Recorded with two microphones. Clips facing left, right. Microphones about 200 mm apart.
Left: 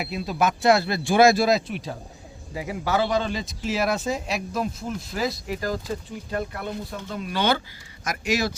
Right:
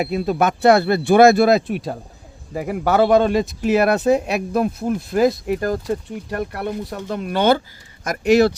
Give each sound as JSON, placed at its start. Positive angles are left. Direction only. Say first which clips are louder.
{"t": 0.0, "sound": "speech", "louder": "right 6 dB", "side_deg": -55}